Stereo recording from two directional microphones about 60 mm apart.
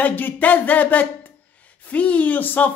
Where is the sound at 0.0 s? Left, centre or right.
Left.